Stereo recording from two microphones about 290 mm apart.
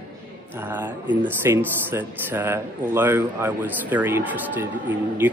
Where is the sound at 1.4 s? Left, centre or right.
Centre.